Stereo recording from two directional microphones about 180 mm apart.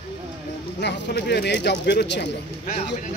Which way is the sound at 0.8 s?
75° left (ahead or behind).